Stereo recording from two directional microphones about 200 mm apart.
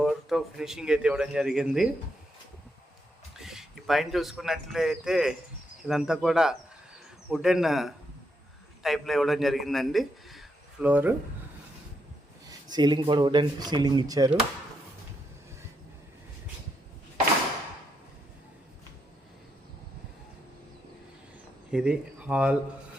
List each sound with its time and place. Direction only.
0.0 s a man's voice: centre (ahead or behind)
3.3 s a man's voice: centre (ahead or behind)
12.5 s speech: 20° right (ahead or behind)
21.7 s speech: 5° right (ahead or behind)